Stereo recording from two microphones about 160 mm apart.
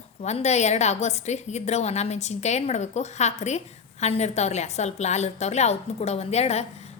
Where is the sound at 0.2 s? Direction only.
45° left (ahead or behind).